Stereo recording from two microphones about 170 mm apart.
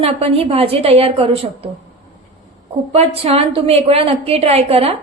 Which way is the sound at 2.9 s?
35° right (ahead or behind).